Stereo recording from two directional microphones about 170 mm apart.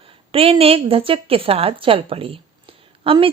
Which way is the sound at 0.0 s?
35° right (ahead or behind).